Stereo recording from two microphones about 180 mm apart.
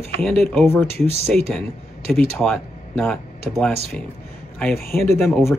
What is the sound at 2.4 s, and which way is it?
Speech, centre (ahead or behind).